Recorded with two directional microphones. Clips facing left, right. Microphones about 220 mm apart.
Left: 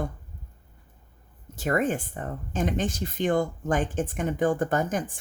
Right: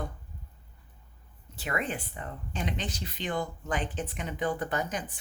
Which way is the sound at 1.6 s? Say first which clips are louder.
Left 8 dB; 45° left (ahead or behind).